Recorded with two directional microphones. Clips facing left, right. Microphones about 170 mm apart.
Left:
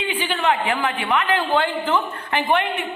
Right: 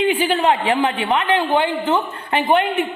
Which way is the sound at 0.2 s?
35° right (ahead or behind).